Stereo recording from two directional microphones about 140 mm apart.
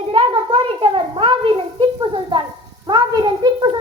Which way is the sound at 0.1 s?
40° right (ahead or behind).